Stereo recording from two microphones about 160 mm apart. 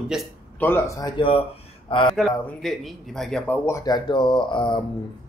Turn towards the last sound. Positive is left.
turn(degrees=30)  # may be behind; listen again after turning